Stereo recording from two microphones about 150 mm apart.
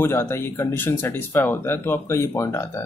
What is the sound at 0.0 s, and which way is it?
Speech, 15° left (ahead or behind).